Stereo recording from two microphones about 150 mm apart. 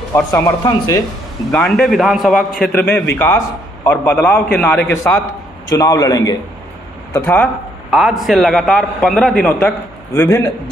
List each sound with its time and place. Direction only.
0.1 s speech: 20° left (ahead or behind)
1.5 s a man's voice: 5° left (ahead or behind)
2.6 s a man's voice: 10° left (ahead or behind)
7.9 s a man's voice: centre (ahead or behind); by 10.5 s 20° left (ahead or behind)